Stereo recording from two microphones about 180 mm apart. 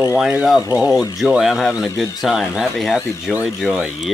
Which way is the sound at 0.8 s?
20° left (ahead or behind).